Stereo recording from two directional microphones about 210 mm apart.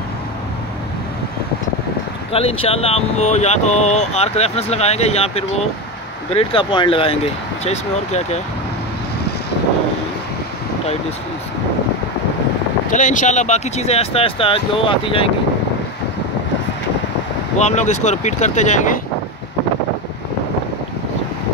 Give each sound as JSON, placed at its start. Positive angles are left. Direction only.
{"t": 2.3, "sound": "speech", "side_deg": 25}
{"t": 12.9, "sound": "speech", "side_deg": 35}
{"t": 17.6, "sound": "speech", "side_deg": 35}